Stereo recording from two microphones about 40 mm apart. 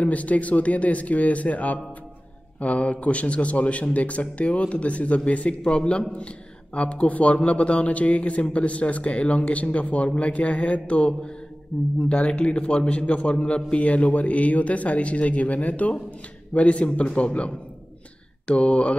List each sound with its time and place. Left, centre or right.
0.0 s a man's voice: left